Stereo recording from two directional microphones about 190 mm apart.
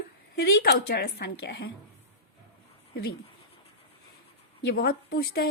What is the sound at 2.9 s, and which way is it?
Speech, 55° left (ahead or behind).